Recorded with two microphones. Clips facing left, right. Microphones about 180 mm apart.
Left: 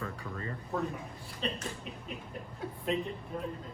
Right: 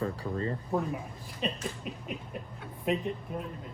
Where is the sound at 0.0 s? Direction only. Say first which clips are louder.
Right 7 dB; 30° right (ahead or behind).